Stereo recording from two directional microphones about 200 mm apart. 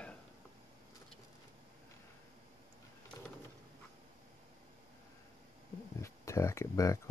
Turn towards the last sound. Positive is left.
turn(degrees=15)  # may be behind; listen again after turning